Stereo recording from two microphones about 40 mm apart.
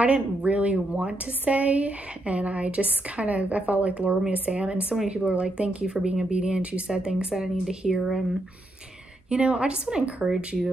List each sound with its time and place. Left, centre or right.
0.0 s a woman's voice: right
9.3 s speech: right